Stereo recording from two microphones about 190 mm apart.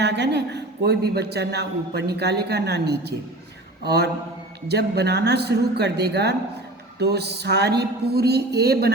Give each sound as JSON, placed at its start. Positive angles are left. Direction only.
{"t": 0.0, "sound": "speech", "side_deg": -65}